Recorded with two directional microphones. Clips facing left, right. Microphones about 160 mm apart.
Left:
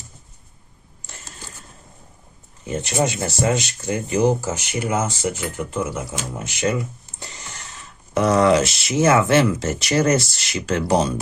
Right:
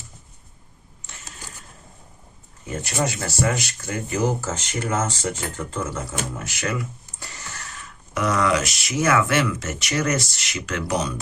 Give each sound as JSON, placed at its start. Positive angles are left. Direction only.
{"t": 2.6, "sound": "speech", "side_deg": 20}
{"t": 6.3, "sound": "speech", "side_deg": 20}